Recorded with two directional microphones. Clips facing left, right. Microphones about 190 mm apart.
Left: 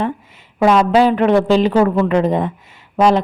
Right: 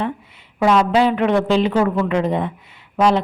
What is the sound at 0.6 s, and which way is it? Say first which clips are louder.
Speech: left 3 dB; 45° left (ahead or behind).